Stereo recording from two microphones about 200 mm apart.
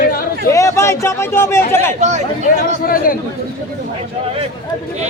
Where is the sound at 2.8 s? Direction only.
45° left (ahead or behind).